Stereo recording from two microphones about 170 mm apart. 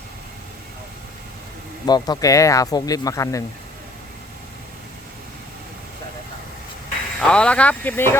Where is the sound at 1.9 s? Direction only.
20° left (ahead or behind).